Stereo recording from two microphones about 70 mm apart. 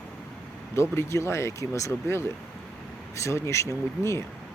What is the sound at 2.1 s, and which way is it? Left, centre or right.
Speech, left.